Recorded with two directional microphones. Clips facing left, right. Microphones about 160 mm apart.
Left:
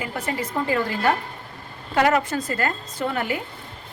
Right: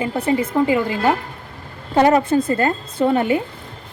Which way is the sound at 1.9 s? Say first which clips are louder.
Right 6 dB; 30° right (ahead or behind).